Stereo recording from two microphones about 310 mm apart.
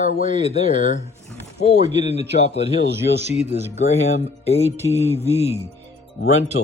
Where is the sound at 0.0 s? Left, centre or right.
Left.